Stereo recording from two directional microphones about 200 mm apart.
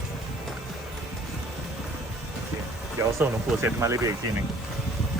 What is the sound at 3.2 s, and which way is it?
Speech, 15° right (ahead or behind).